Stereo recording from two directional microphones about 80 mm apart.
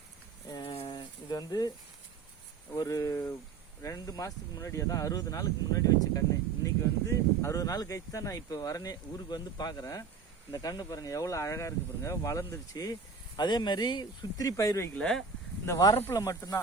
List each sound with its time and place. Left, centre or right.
0.5 s a sound: left
2.7 s speech: left
14.9 s speech: centre
15.6 s speech: left